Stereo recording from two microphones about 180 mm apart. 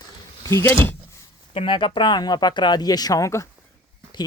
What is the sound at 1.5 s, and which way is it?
Speech, 25° left (ahead or behind).